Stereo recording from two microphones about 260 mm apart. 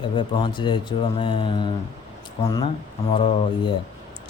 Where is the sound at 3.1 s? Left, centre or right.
Left.